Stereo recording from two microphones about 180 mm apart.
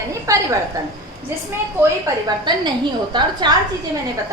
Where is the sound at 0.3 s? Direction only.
20° right (ahead or behind).